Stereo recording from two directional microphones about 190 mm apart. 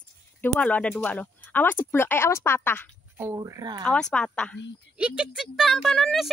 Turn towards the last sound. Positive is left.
turn(degrees=0)  # may be behind; listen again after turning